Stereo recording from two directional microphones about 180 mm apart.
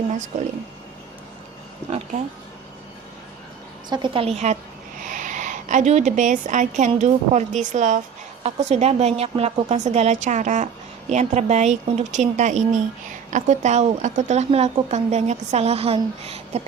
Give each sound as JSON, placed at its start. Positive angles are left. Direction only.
{"t": 0.1, "sound": "speech", "side_deg": -40}
{"t": 3.8, "sound": "a woman's voice", "side_deg": -25}